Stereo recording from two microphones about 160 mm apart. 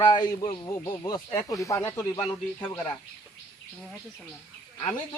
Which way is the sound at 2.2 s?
30° left (ahead or behind).